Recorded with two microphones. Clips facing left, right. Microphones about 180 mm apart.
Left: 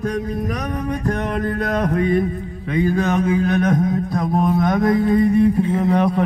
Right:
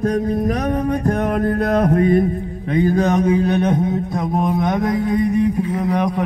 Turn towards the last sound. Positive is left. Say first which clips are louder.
# left 2 dB
turn(degrees=-10)  # may be behind; listen again after turning